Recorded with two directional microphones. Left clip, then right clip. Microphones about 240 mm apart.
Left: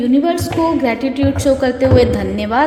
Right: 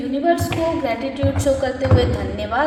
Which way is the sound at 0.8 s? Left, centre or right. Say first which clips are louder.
Left 5 dB; left.